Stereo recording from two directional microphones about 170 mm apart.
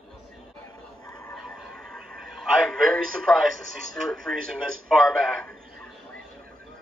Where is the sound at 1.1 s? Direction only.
20° left (ahead or behind).